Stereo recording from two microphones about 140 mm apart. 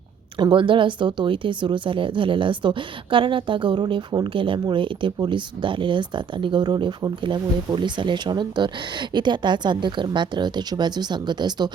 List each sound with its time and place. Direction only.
0.3 s speech: 35° right (ahead or behind)